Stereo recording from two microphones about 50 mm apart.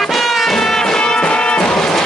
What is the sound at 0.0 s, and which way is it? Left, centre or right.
Music, centre.